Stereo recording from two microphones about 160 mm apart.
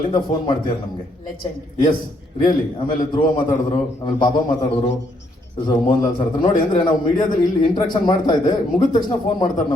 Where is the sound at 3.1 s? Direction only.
30° left (ahead or behind).